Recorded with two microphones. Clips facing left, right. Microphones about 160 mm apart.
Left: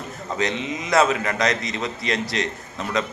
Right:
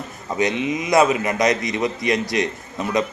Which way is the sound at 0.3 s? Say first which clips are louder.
Right 5 dB; 15° right (ahead or behind).